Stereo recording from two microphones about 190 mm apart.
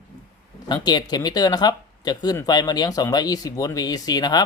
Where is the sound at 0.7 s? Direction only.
20° left (ahead or behind).